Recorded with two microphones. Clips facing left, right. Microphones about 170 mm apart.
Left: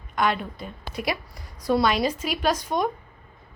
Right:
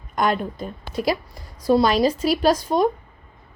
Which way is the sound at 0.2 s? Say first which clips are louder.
Right 3 dB; 45° right (ahead or behind).